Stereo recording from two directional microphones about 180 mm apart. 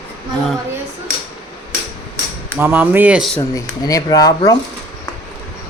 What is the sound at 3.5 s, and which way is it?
Speech, 20° left (ahead or behind).